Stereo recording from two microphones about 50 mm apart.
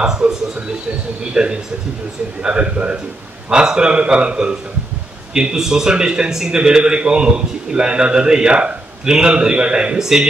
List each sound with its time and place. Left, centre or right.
0.0 s a sound: centre
1.3 s a man's voice: centre
9.9 s a man's voice: centre